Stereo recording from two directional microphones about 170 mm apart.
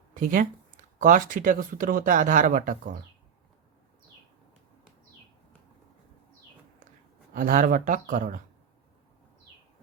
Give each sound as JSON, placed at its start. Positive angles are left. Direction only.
{"t": 0.1, "sound": "speech", "side_deg": -55}
{"t": 7.3, "sound": "speech", "side_deg": -50}